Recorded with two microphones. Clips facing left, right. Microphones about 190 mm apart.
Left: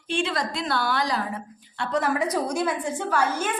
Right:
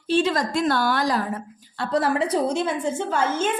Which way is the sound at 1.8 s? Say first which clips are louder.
Right 3 dB; 30° right (ahead or behind).